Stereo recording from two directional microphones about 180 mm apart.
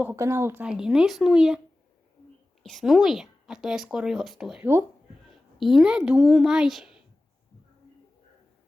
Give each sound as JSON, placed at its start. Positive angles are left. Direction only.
{"t": 0.0, "sound": "a woman's voice", "side_deg": -15}
{"t": 2.6, "sound": "a woman's voice", "side_deg": 0}